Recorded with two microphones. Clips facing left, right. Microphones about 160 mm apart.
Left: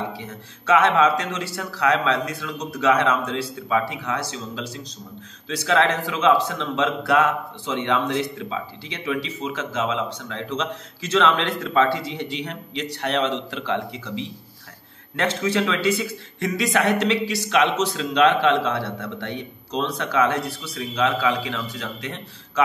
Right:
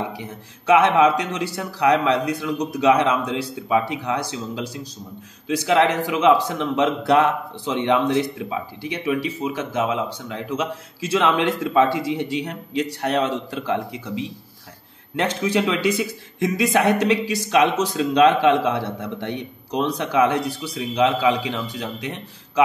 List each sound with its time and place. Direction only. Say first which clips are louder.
0.1 s a man's voice: right 1 dB; 15° right (ahead or behind)
15.1 s a man's voice: right 1 dB; 15° right (ahead or behind)